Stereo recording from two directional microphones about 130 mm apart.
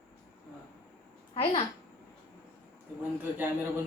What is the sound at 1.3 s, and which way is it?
Speech, 45° left (ahead or behind).